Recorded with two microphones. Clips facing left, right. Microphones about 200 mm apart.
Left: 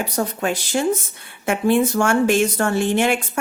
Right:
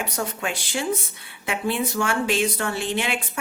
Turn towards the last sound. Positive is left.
turn(degrees=50)  # may be behind; listen again after turning